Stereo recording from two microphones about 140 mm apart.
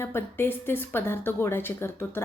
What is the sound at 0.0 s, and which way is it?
A woman's voice, 15° left (ahead or behind).